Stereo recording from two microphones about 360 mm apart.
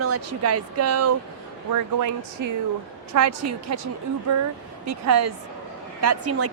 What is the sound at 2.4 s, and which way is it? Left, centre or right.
Speech, right.